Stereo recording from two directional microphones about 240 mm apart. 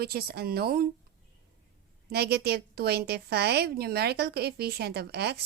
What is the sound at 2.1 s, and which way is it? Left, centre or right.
A woman's voice, right.